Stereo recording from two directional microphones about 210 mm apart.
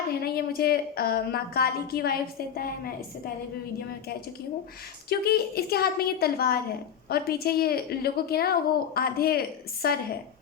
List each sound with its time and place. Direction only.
0.1 s a woman's voice: 45° left (ahead or behind)
5.0 s a woman's voice: 45° left (ahead or behind)